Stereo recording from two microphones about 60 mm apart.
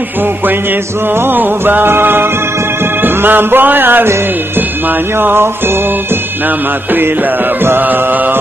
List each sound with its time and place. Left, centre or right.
1.2 s music: right
5.2 s music: right
7.6 s music: right